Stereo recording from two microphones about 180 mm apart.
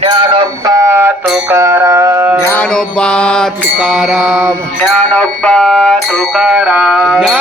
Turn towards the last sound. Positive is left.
turn(degrees=-5)  # may be behind; listen again after turning